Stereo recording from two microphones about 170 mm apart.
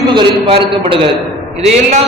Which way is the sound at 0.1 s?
30° right (ahead or behind).